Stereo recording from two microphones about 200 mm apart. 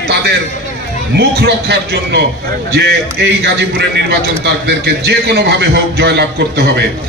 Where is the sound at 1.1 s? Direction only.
55° right (ahead or behind).